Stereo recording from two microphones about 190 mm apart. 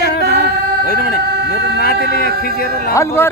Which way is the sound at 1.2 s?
60° right (ahead or behind).